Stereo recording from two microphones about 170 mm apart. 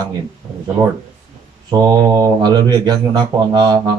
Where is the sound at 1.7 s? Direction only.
20° right (ahead or behind).